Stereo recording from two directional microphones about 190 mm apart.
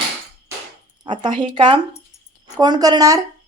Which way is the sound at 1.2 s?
25° right (ahead or behind).